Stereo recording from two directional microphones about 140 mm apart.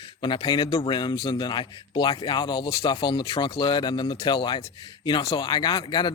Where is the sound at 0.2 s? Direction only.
35° left (ahead or behind).